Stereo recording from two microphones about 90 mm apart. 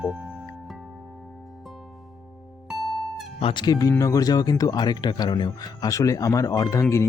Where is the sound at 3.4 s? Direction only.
90° left.